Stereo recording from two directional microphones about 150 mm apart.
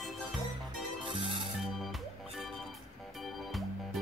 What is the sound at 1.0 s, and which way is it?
Music, 35° right (ahead or behind).